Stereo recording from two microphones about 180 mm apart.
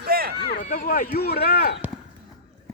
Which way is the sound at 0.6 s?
50° left (ahead or behind).